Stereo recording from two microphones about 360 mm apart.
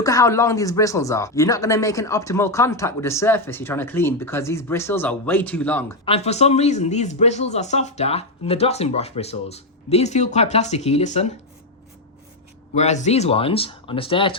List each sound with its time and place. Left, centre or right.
0.0 s speech: centre
6.1 s speech: centre
12.7 s speech: centre